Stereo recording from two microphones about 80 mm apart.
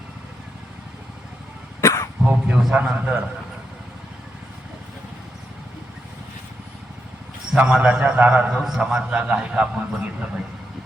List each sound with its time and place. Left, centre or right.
1.8 s cough: left
2.2 s a man's voice: centre
7.5 s a man's voice: centre